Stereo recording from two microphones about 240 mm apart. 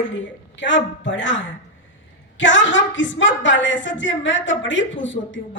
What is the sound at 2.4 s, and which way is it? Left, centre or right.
A woman's voice, left.